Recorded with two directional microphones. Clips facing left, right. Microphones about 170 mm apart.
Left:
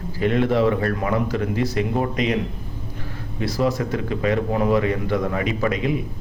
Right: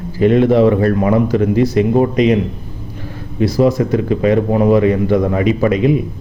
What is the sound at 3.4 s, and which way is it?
A man's voice, 15° right (ahead or behind).